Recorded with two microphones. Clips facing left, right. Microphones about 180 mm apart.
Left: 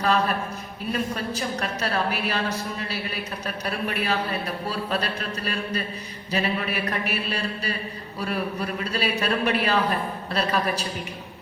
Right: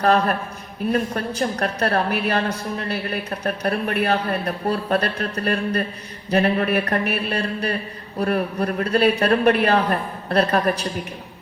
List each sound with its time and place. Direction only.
0.0 s a woman's voice: 55° right (ahead or behind)